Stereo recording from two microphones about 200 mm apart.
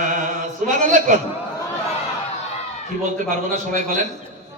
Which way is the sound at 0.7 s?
40° right (ahead or behind).